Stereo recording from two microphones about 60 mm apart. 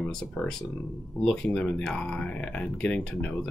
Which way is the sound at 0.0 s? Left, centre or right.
Centre.